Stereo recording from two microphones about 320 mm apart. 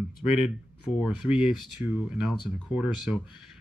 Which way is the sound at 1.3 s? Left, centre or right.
Centre.